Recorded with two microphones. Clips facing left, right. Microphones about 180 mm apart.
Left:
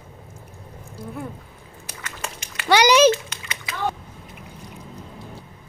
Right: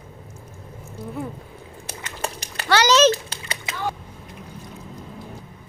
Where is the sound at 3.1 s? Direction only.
35° right (ahead or behind).